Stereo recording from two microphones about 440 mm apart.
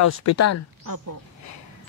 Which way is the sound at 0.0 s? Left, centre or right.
Left.